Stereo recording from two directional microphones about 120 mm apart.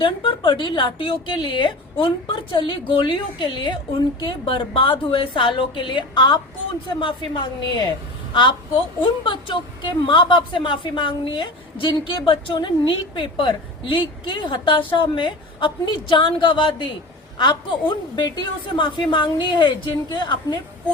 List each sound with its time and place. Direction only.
0.0 s a woman's voice: 45° left (ahead or behind)